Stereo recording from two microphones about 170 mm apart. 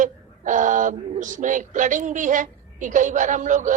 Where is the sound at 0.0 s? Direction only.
50° right (ahead or behind).